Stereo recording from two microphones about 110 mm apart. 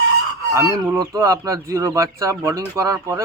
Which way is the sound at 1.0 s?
30° right (ahead or behind).